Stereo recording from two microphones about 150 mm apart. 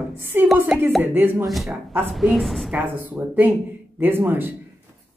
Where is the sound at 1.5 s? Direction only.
Centre (ahead or behind).